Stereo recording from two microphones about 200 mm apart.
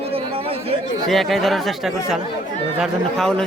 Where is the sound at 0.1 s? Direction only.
30° right (ahead or behind).